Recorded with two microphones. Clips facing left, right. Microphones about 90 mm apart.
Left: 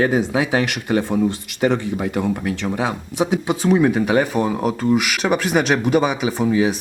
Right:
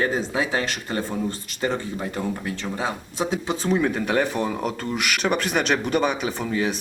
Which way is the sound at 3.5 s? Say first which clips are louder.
Left 6 dB; 55° left (ahead or behind).